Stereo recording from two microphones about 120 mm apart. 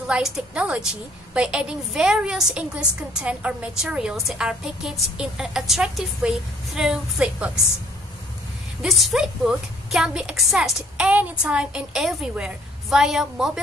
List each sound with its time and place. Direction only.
0.0 s a woman's voice: 10° right (ahead or behind)
8.8 s a woman's voice: centre (ahead or behind)